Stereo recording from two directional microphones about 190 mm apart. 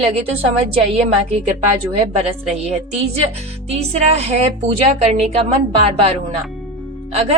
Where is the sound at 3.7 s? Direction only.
35° right (ahead or behind).